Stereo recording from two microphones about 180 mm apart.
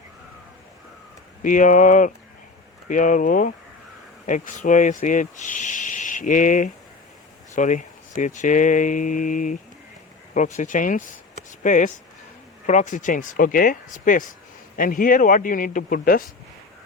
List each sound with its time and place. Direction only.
1.4 s speech: 45° left (ahead or behind)